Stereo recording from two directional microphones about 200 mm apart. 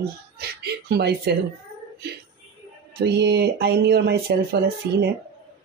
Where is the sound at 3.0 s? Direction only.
55° right (ahead or behind).